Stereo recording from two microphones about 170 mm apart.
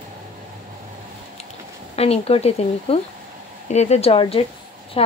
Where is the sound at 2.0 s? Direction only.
35° left (ahead or behind).